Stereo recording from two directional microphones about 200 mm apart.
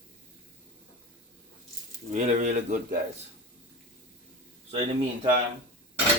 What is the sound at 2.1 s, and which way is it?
Speech, 35° right (ahead or behind).